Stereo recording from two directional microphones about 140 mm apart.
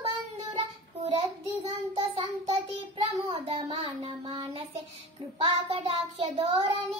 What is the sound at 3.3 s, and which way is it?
Child singing, 40° right (ahead or behind).